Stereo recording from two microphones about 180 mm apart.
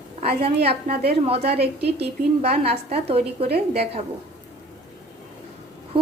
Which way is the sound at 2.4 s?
35° right (ahead or behind).